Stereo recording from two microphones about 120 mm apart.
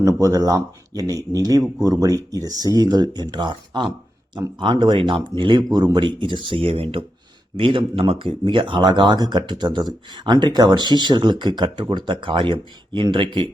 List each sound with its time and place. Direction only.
0.0 s speech: 30° right (ahead or behind); by 13.2 s 45° right (ahead or behind)